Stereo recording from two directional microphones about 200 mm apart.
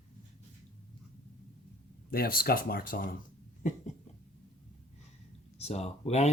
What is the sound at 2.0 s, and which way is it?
Speech, 50° left (ahead or behind).